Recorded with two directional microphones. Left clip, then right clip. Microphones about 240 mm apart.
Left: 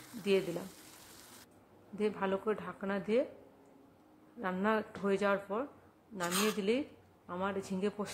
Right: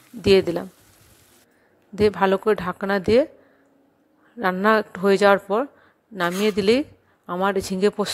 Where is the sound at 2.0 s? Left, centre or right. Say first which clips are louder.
Right 16 dB; right.